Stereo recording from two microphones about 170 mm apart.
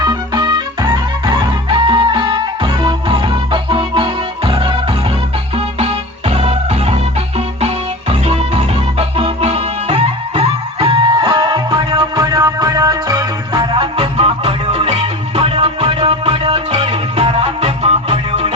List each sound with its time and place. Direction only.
0.0 s music: 25° right (ahead or behind)